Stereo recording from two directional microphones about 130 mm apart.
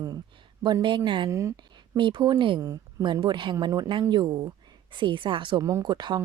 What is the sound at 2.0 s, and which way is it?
A woman's voice, 35° right (ahead or behind).